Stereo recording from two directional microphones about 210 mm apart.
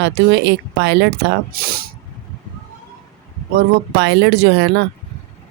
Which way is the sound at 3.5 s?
55° right (ahead or behind).